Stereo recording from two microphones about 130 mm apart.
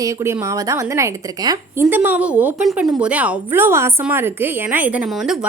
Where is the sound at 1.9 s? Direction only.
10° right (ahead or behind).